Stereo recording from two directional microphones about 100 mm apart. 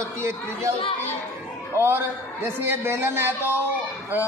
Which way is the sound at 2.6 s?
25° right (ahead or behind).